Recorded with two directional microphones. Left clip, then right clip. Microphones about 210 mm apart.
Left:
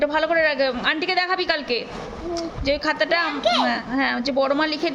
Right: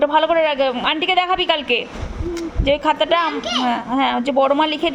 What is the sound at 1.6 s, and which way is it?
Speech, 25° left (ahead or behind).